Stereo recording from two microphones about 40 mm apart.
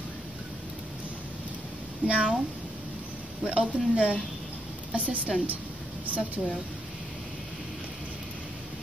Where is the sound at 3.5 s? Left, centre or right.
Right.